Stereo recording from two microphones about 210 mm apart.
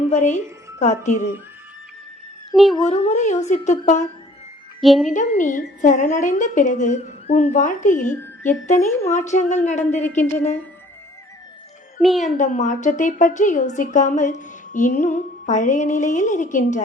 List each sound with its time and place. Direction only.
0.1 s a woman's voice: 35° left (ahead or behind)
2.5 s speech: centre (ahead or behind)
2.8 s a woman's voice: 30° left (ahead or behind)
4.8 s speech: centre (ahead or behind)
5.1 s a woman's voice: 35° left (ahead or behind)
8.0 s speech: 10° left (ahead or behind)
8.6 s a woman's voice: 35° left (ahead or behind)
12.2 s a woman's voice: 35° left (ahead or behind)